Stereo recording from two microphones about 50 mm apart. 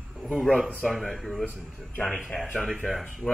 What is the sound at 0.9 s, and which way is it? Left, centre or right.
Speech, centre.